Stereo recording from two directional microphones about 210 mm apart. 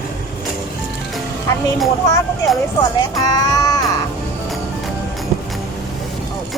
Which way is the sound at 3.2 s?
20° left (ahead or behind).